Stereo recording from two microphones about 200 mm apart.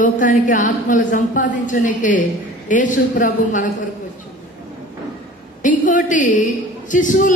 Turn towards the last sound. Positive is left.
turn(degrees=40)  # may be behind; listen again after turning